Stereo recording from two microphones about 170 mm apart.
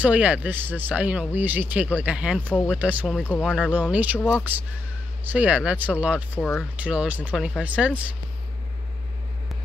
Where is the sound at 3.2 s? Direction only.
5° left (ahead or behind).